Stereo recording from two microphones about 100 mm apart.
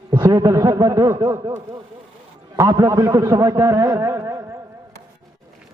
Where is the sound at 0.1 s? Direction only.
35° right (ahead or behind).